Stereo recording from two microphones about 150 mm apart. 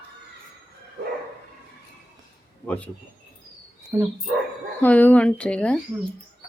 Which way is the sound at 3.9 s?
20° right (ahead or behind).